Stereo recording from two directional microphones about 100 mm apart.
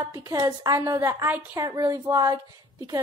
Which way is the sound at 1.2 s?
20° right (ahead or behind).